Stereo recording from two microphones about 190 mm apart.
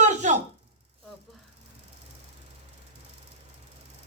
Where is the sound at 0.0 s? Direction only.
40° right (ahead or behind).